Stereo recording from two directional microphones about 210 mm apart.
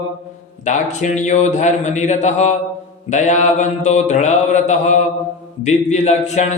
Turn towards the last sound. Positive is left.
turn(degrees=35)  # may be behind; listen again after turning